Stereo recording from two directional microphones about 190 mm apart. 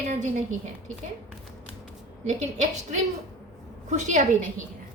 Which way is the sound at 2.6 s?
40° right (ahead or behind).